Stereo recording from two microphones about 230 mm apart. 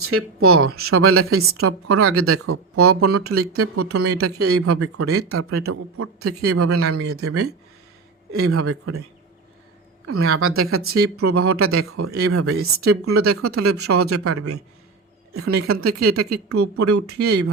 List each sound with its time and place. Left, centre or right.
0.0 s a woman's voice: right
10.1 s a woman's voice: right